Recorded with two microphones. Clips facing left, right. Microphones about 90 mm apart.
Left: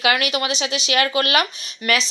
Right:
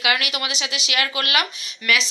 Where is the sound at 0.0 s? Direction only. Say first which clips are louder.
Left 4 dB; 35° left (ahead or behind).